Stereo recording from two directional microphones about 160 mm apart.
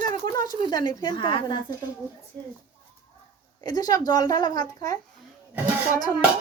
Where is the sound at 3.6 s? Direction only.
25° left (ahead or behind).